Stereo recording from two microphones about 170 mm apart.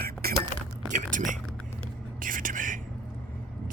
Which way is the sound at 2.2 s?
55° right (ahead or behind).